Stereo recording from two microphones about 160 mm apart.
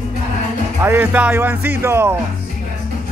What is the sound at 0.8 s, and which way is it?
Speech, 15° right (ahead or behind).